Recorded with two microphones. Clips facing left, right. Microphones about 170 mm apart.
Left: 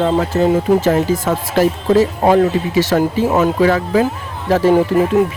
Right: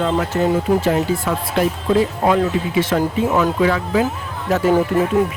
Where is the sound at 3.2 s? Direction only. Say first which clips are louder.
Left 3 dB; 30° left (ahead or behind).